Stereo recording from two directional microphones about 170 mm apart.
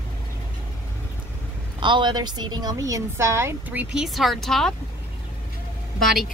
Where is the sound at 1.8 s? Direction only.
25° right (ahead or behind).